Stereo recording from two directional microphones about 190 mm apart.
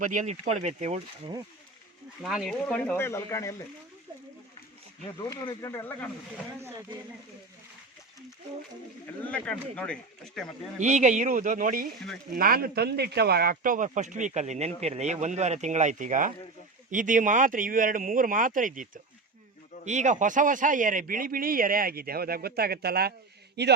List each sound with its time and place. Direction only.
0.0 s speech: 40° right (ahead or behind)
2.2 s speech: centre (ahead or behind)
5.3 s speech: 20° left (ahead or behind)
9.2 s speech: 5° left (ahead or behind)
10.8 s a man's voice: 40° right (ahead or behind); by 23.7 s 60° right (ahead or behind)